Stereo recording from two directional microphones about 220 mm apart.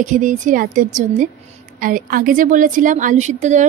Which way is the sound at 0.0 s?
35° right (ahead or behind).